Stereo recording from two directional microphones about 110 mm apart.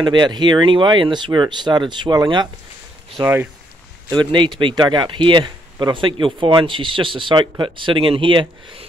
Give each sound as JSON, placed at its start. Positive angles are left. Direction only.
{"t": 0.0, "sound": "speech", "side_deg": -45}
{"t": 4.1, "sound": "speech", "side_deg": -45}